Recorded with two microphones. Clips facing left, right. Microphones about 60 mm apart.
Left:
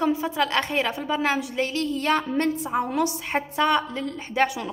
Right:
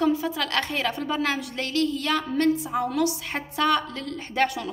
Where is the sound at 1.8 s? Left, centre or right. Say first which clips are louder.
Right 1 dB; left.